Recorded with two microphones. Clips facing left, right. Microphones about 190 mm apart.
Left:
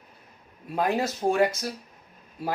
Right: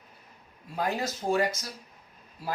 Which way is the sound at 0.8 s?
60° left (ahead or behind).